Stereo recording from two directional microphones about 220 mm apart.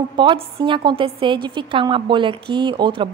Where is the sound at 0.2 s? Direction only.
20° right (ahead or behind).